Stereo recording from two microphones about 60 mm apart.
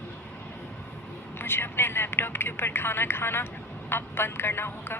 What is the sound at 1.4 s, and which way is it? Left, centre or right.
Speech, left.